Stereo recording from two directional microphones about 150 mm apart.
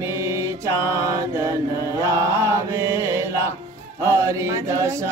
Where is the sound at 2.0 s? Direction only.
20° right (ahead or behind).